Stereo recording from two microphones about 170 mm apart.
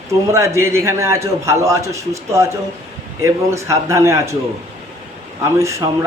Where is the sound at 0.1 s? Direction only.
15° right (ahead or behind).